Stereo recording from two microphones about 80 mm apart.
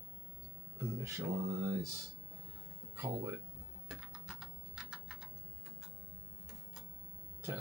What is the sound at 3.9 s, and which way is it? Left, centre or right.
Typing, centre.